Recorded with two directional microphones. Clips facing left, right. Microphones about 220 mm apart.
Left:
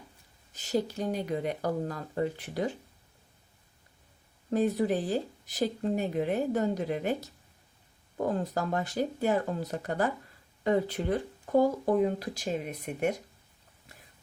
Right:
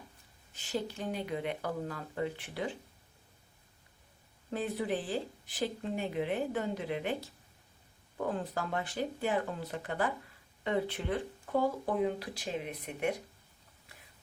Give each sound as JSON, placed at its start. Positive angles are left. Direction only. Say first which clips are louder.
{"t": 0.5, "sound": "speech", "louder": "left 6 dB", "side_deg": 40}
{"t": 4.5, "sound": "speech", "louder": "left 7 dB", "side_deg": 40}